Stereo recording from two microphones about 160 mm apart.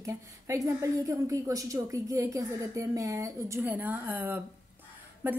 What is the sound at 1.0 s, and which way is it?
A woman's voice, 20° right (ahead or behind).